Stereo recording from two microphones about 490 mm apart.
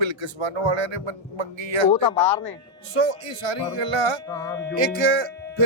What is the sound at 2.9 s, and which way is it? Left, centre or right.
Speech, right.